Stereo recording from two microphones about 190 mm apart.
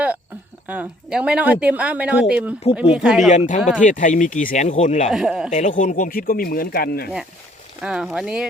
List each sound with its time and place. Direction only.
0.7 s speech: 5° right (ahead or behind)
3.2 s speech: 40° left (ahead or behind)
5.1 s speech: 5° right (ahead or behind)
5.5 s speech: 40° left (ahead or behind)
7.8 s speech: 5° right (ahead or behind)